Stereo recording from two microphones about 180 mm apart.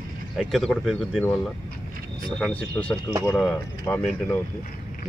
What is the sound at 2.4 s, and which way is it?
Speech, 5° left (ahead or behind).